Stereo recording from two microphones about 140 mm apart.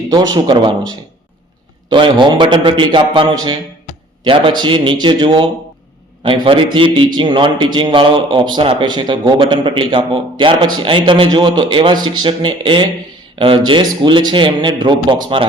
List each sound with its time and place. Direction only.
0.1 s a man's voice: 30° right (ahead or behind)